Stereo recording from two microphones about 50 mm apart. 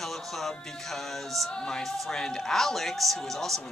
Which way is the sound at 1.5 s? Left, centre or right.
Centre.